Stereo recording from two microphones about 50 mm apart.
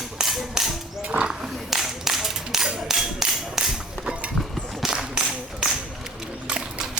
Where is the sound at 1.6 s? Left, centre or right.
Centre.